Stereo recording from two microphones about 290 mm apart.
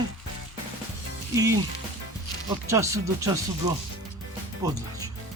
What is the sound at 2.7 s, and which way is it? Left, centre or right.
Speech, centre.